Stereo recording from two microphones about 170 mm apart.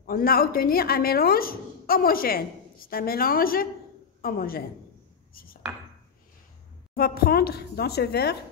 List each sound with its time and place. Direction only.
0.0 s a woman's voice: 60° left (ahead or behind)
5.3 s chopping: 60° left (ahead or behind)
7.0 s a woman's voice: 65° left (ahead or behind)